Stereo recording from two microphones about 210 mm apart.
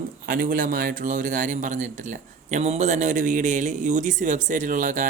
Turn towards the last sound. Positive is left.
turn(degrees=-35)  # may be behind; listen again after turning